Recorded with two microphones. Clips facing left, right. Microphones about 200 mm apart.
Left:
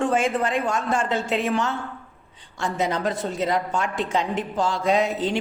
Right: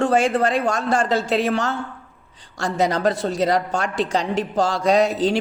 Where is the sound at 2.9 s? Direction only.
75° right (ahead or behind).